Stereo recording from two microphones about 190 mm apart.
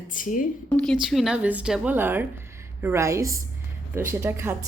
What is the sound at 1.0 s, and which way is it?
Speech, centre (ahead or behind).